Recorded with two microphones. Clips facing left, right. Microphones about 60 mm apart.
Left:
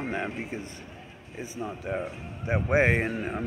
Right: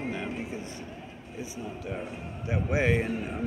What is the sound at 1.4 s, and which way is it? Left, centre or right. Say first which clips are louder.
A man's voice: left 3 dB; left.